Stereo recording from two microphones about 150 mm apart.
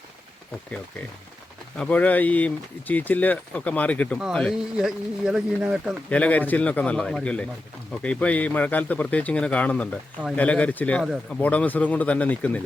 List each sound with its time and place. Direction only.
1.8 s speech: 10° left (ahead or behind)
6.1 s speech: 10° left (ahead or behind)
11.0 s speech: 5° right (ahead or behind)
11.3 s speech: 10° left (ahead or behind)